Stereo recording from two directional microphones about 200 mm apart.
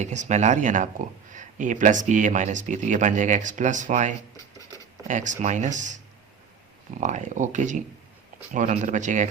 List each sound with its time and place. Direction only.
0.0 s speech: 35° right (ahead or behind)
7.0 s speech: 35° right (ahead or behind)